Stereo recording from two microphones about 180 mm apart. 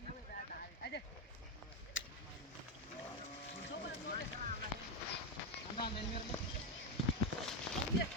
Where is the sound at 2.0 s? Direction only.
90° left.